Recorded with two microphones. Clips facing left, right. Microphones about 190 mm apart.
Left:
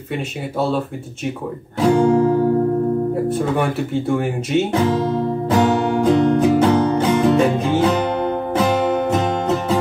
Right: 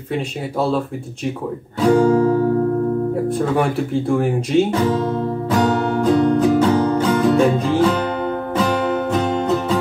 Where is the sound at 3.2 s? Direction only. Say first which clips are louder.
Right 1 dB; 5° left (ahead or behind).